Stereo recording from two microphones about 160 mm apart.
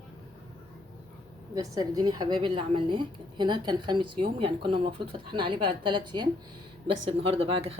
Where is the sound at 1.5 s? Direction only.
20° right (ahead or behind).